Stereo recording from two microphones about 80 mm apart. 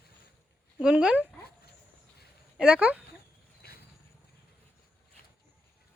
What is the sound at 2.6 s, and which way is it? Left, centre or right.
Speech, centre.